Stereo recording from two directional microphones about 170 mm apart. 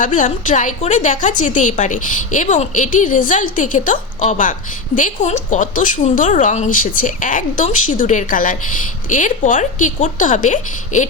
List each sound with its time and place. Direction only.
0.0 s a woman's voice: 50° left (ahead or behind)